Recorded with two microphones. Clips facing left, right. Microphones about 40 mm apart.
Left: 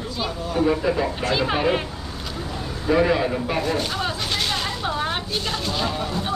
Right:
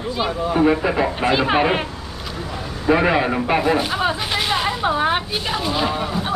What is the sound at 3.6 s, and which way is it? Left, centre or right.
Speech, centre.